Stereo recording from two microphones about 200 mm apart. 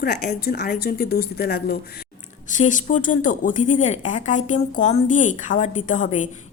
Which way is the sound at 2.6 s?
40° left (ahead or behind).